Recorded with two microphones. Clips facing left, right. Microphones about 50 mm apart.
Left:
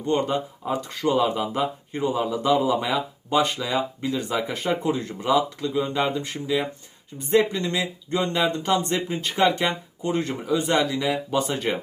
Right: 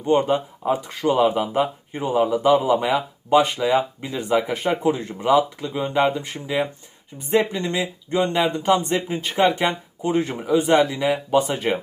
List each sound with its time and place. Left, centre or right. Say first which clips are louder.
0.0 s speech: right 4 dB; centre
1.3 s speech: right 3 dB; right
7.6 s speech: right 2 dB; centre